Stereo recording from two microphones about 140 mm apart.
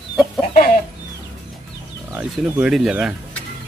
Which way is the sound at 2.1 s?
10° right (ahead or behind).